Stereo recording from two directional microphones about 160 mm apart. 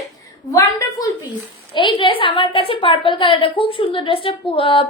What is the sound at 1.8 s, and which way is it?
A woman's voice, 30° left (ahead or behind).